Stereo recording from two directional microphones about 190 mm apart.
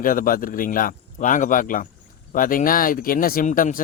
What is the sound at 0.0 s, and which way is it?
Speech, 45° left (ahead or behind).